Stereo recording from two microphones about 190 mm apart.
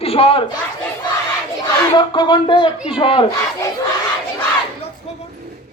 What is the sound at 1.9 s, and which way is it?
Speech, 25° left (ahead or behind).